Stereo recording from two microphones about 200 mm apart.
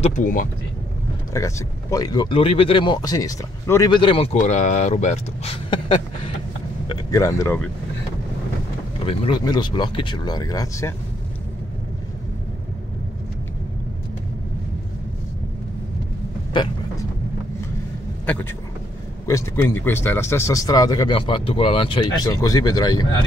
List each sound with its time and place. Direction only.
0.0 s speech: 40° left (ahead or behind)
1.3 s speech: 15° left (ahead or behind)
9.0 s speech: 25° left (ahead or behind)
18.2 s speech: 5° left (ahead or behind)